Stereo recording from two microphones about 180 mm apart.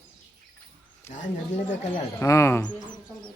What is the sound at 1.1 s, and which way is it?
Speech, 45° left (ahead or behind).